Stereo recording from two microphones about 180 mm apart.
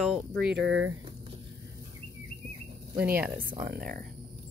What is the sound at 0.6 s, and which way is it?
Speech, 80° right.